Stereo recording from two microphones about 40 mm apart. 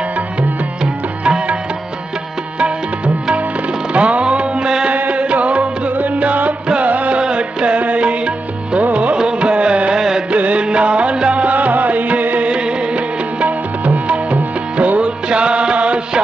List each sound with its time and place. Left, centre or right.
1.2 s music: right
3.9 s music: right
4.9 s music: right
7.2 s music: right
9.9 s music: centre
10.3 s music: right
11.5 s music: right
12.4 s music: right